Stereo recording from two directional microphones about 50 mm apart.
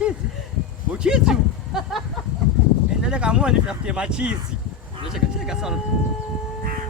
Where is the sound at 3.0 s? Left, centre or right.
Centre.